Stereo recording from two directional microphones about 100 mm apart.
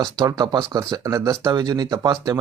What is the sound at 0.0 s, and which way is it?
Speech, 35° right (ahead or behind).